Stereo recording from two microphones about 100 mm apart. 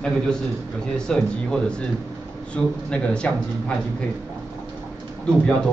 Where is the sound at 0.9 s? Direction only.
5° left (ahead or behind).